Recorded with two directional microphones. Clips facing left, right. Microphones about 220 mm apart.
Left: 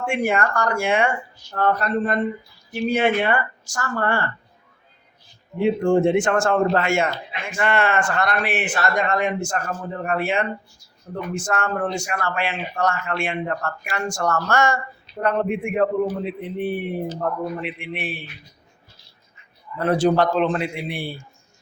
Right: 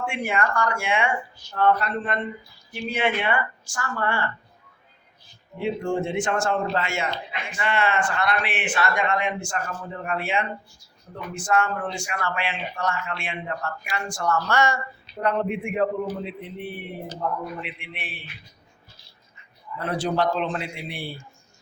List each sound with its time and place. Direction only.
0.0 s a man's voice: 45° left (ahead or behind)
5.8 s a man's voice: 55° left (ahead or behind)
19.8 s a man's voice: 50° left (ahead or behind)